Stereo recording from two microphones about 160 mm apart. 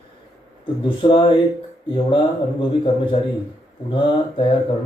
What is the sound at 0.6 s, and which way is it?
Speech, 30° left (ahead or behind).